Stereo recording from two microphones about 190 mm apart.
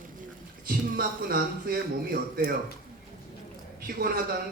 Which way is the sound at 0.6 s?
50° right (ahead or behind).